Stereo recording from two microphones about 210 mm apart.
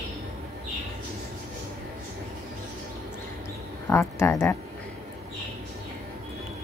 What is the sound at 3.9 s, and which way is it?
Speech, 10° left (ahead or behind).